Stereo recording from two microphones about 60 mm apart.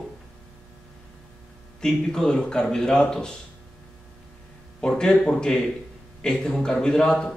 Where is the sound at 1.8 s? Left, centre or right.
Centre.